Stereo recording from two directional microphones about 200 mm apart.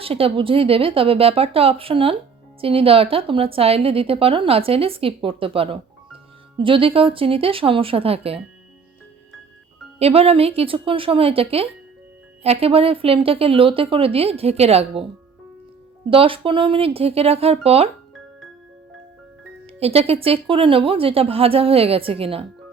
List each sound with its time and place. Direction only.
0.0 s a woman's voice: 30° right (ahead or behind)
10.0 s a woman's voice: 30° right (ahead or behind)
16.0 s a woman's voice: 25° right (ahead or behind)
19.8 s a woman's voice: 30° right (ahead or behind)